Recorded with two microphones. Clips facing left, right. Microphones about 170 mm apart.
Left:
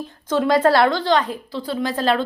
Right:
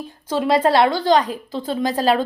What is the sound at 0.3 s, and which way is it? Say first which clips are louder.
Speech: left 1 dB; 30° right (ahead or behind).